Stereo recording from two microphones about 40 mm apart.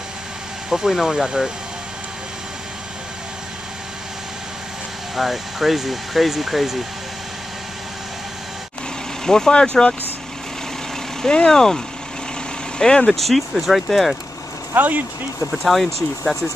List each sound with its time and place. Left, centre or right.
0.7 s speech: centre
5.1 s speech: centre
9.2 s speech: centre
11.2 s speech: centre
13.1 s speech: centre
14.8 s speech: right
15.5 s speech: centre